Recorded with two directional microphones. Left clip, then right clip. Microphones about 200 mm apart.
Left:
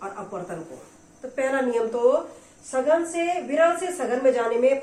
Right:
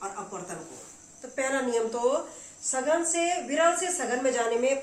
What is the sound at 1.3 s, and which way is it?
Speech, 20° right (ahead or behind).